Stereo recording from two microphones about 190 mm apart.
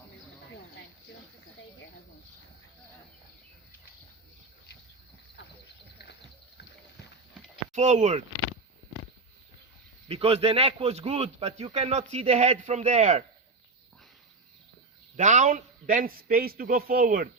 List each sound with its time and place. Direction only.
7.7 s a man's voice: 40° right (ahead or behind)
10.1 s a man's voice: 30° right (ahead or behind)
15.1 s a man's voice: 40° right (ahead or behind)